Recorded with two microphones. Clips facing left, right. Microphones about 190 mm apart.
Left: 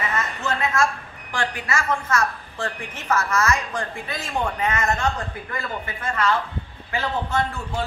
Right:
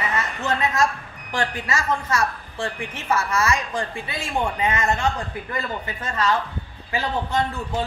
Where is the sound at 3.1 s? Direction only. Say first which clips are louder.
Even; 15° right (ahead or behind).